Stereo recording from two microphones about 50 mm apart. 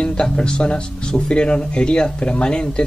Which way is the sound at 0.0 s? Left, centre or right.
Centre.